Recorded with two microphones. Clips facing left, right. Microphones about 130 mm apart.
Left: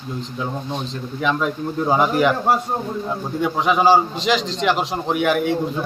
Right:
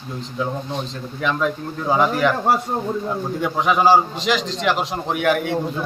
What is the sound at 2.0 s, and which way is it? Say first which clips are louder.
Speech: even; 10° left (ahead or behind).